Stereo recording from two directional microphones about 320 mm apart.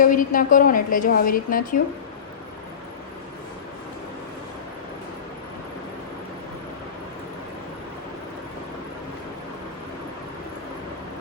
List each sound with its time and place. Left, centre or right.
0.0 s a woman's voice: left